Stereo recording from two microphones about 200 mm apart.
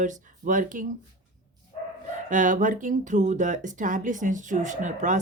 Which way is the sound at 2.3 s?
40° right (ahead or behind).